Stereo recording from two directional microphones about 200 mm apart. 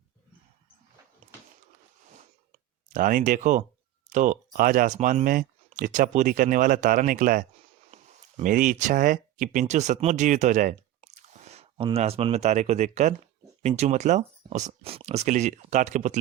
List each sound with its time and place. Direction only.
2.9 s speech: 45° right (ahead or behind)